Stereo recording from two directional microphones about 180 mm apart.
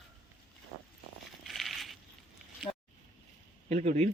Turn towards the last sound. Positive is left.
turn(degrees=-40)  # may be behind; listen again after turning